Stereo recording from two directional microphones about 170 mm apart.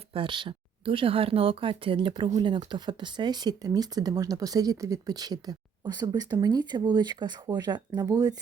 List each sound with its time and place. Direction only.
0.1 s speech: 30° right (ahead or behind)